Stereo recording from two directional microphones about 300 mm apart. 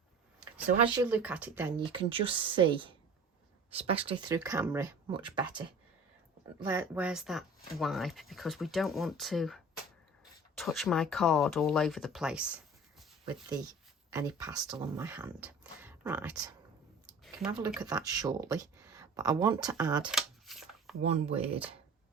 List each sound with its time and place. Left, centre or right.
1.0 s speech: centre
10.6 s speech: centre
14.2 s speech: centre
17.2 s a sound: centre
17.7 s speech: centre
20.1 s shuffling cards: centre
21.0 s speech: right